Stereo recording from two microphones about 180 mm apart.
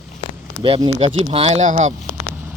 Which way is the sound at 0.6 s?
25° right (ahead or behind).